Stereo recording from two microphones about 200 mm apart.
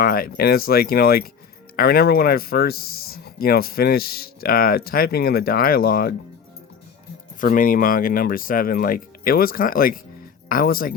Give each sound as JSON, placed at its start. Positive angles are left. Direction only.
{"t": 0.0, "sound": "speech", "side_deg": 45}
{"t": 7.4, "sound": "speech", "side_deg": 45}